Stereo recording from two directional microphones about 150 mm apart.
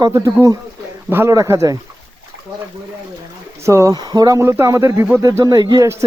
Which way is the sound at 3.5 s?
20° right (ahead or behind).